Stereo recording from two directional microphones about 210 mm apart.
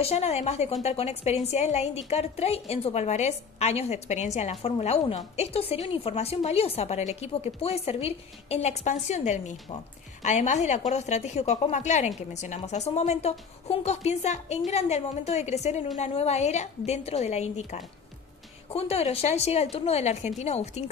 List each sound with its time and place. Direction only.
0.0 s a woman's voice: 30° left (ahead or behind)